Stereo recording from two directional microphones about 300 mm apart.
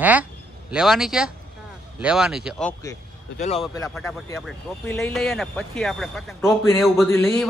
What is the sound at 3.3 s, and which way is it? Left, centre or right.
Speech, left.